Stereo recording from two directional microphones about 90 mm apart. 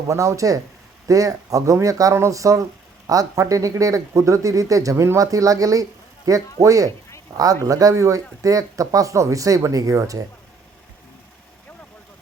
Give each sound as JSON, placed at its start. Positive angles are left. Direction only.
{"t": 0.1, "sound": "speech", "side_deg": -35}